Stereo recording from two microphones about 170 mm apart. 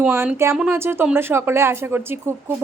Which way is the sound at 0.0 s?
10° right (ahead or behind).